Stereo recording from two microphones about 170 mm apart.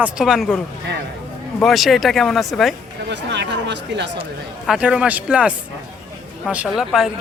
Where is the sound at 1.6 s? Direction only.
Centre (ahead or behind).